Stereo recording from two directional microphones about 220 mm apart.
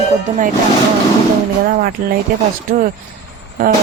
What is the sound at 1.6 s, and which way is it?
Speech, 40° right (ahead or behind).